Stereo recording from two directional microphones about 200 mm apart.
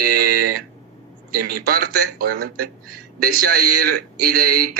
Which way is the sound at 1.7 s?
50° right (ahead or behind).